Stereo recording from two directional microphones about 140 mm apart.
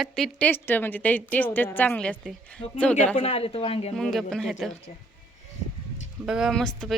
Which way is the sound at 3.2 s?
45° left (ahead or behind).